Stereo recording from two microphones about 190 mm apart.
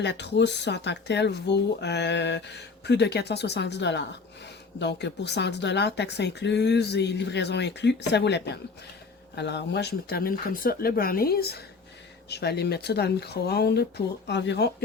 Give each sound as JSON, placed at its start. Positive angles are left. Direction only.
{"t": 0.0, "sound": "speech", "side_deg": 65}